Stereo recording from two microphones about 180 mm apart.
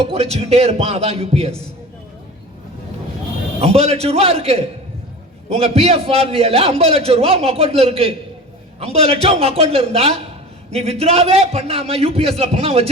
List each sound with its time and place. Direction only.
0.0 s a man's voice: 35° right (ahead or behind)
3.6 s a man's voice: 35° right (ahead or behind)